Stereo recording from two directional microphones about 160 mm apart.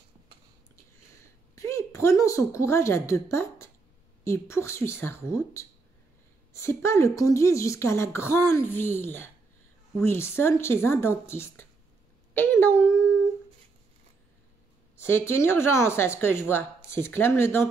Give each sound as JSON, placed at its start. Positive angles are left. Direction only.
{"t": 1.2, "sound": "a sound", "side_deg": 20}
{"t": 4.2, "sound": "a woman's voice", "side_deg": 15}
{"t": 15.0, "sound": "a woman's voice", "side_deg": 15}